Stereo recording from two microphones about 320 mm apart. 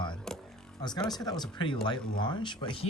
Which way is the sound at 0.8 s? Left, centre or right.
Centre.